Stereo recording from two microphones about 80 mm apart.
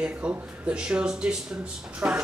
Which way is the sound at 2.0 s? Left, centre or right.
Right.